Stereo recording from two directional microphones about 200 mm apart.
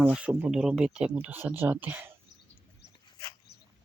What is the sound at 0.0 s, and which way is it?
Speech, 5° right (ahead or behind).